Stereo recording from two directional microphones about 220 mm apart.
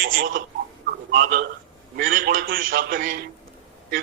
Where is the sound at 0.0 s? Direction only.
40° right (ahead or behind).